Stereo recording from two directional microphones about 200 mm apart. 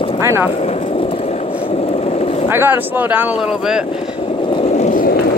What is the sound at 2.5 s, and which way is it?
Speech, 10° right (ahead or behind).